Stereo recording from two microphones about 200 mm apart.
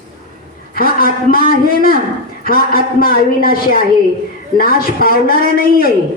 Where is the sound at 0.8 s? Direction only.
45° left (ahead or behind).